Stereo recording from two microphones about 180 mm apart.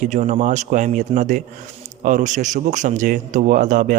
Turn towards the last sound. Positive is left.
turn(degrees=-45)  # may be behind; listen again after turning